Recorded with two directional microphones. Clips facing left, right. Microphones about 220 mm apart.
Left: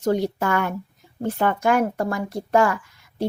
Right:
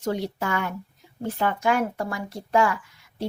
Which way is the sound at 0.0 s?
45° left (ahead or behind).